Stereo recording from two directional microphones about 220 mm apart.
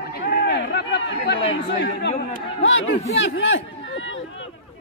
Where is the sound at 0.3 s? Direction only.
50° left (ahead or behind).